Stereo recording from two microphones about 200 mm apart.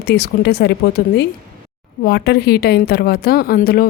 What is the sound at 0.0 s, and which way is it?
A woman's voice, 55° left (ahead or behind).